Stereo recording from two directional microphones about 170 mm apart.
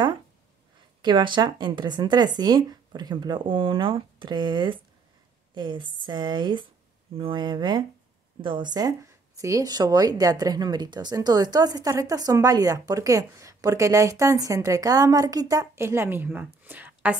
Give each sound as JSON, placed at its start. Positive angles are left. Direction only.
{"t": 1.0, "sound": "speech", "side_deg": -30}